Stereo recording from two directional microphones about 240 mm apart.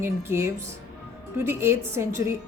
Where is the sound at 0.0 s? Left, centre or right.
Centre.